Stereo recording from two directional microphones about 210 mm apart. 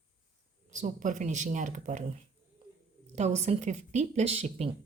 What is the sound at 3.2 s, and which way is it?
Speech, 30° right (ahead or behind).